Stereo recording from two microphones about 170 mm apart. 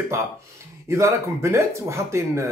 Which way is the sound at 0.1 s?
15° right (ahead or behind).